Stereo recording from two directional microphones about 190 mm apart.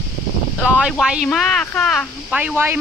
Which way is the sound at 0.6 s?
5° right (ahead or behind).